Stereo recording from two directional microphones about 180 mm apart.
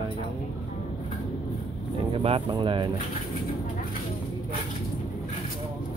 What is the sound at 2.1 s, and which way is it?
Speech, 30° right (ahead or behind).